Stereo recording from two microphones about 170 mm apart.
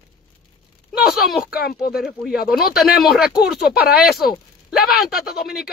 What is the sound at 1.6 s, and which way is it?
Speech, 65° left (ahead or behind).